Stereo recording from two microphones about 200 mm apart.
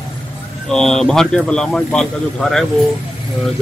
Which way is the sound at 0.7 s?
Centre (ahead or behind).